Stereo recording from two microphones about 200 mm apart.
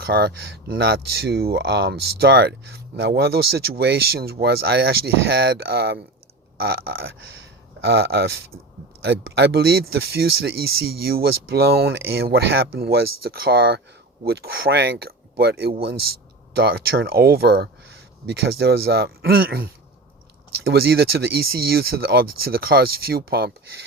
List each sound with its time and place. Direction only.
0.0 s speech: 50° right (ahead or behind)